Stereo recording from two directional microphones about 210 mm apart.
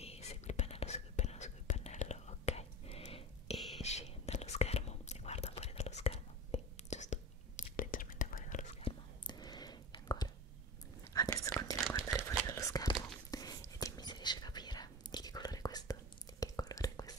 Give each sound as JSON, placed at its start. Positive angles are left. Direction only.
{"t": 0.0, "sound": "whispering", "side_deg": 30}
{"t": 9.3, "sound": "whispering", "side_deg": 20}
{"t": 12.0, "sound": "whispering", "side_deg": -5}
{"t": 12.4, "sound": "whispering", "side_deg": 15}